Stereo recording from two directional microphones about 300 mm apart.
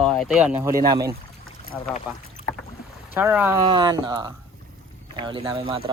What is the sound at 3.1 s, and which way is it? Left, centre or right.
Speech, centre.